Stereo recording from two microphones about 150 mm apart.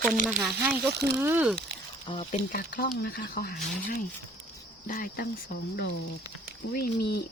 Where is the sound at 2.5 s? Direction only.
85° left.